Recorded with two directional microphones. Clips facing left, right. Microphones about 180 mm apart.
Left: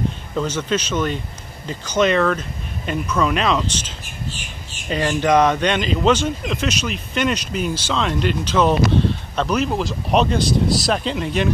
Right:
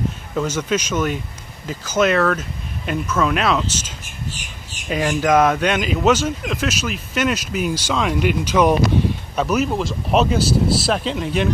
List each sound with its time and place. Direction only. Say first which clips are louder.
0.4 s speech: right 1 dB; 10° right (ahead or behind)